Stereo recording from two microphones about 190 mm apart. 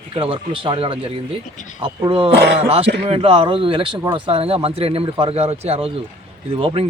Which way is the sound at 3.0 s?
30° right (ahead or behind).